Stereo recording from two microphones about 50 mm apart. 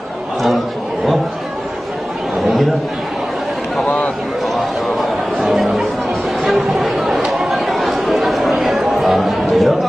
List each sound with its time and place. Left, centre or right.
2.4 s chatter: centre
5.4 s chatter: centre